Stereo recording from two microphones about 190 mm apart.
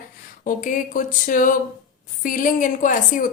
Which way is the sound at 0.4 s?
45° left (ahead or behind).